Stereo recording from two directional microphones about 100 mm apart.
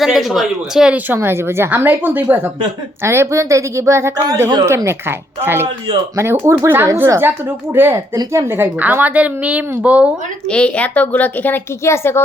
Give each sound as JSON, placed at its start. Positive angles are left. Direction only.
{"t": 0.0, "sound": "speech", "side_deg": 0}
{"t": 1.1, "sound": "a woman's voice", "side_deg": -25}
{"t": 10.5, "sound": "a woman's voice", "side_deg": 10}